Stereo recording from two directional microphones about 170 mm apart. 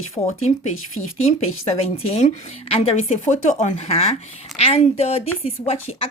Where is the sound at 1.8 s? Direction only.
35° left (ahead or behind).